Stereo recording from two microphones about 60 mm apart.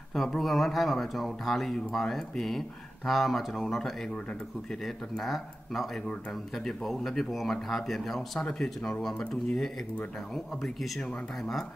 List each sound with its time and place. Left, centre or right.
0.1 s speech: centre
5.2 s speech: centre
10.3 s speech: centre